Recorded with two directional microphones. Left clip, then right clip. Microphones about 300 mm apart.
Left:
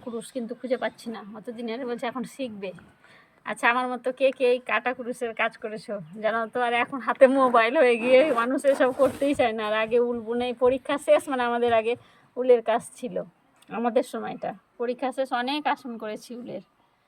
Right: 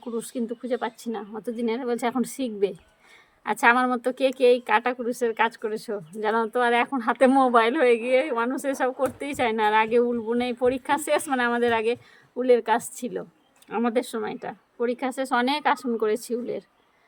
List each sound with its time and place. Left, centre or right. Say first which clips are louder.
0.2 s a woman's voice: right 3 dB; centre